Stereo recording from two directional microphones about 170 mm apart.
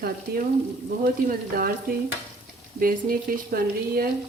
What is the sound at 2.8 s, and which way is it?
Speech, 60° right (ahead or behind).